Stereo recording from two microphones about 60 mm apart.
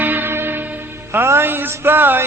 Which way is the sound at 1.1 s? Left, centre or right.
Right.